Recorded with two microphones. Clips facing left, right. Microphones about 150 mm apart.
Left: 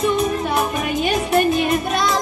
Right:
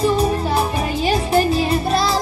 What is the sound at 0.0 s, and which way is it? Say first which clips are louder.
Music: right 1 dB; 30° right (ahead or behind).